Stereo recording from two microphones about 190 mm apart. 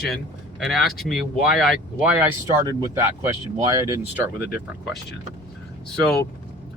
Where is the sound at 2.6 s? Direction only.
20° right (ahead or behind).